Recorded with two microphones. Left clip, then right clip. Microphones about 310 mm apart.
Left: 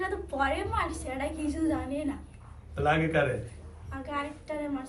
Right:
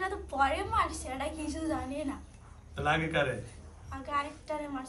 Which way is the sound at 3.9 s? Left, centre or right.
Centre.